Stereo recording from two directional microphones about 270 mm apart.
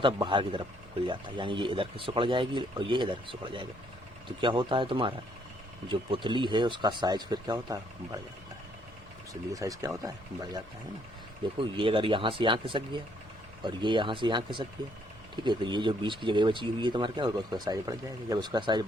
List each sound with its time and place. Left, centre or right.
0.0 s speech: centre
6.2 s speech: centre
9.3 s speech: centre